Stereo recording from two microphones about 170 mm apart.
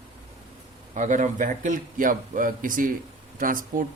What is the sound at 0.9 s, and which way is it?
A man's voice, 45° right (ahead or behind).